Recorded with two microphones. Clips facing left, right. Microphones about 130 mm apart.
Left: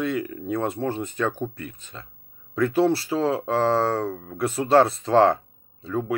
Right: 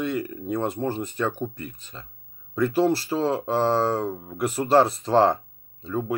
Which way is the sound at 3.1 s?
5° right (ahead or behind).